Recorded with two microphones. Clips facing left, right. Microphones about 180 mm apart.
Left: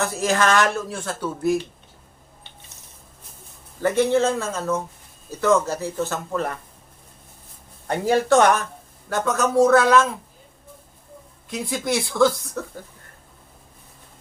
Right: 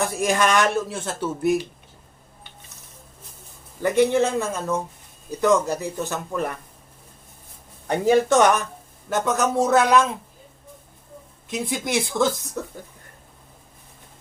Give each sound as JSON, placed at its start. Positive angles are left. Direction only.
{"t": 0.2, "sound": "speech", "side_deg": -15}
{"t": 3.8, "sound": "speech", "side_deg": -15}
{"t": 7.9, "sound": "speech", "side_deg": -20}
{"t": 11.7, "sound": "speech", "side_deg": -20}